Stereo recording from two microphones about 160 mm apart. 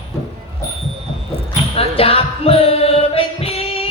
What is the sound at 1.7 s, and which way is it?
Music, 35° left (ahead or behind).